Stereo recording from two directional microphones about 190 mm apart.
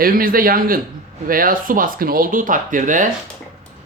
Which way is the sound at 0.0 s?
50° right (ahead or behind).